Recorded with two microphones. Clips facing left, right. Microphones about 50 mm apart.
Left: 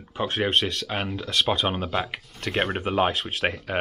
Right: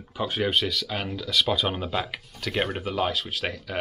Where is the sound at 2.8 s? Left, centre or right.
Left.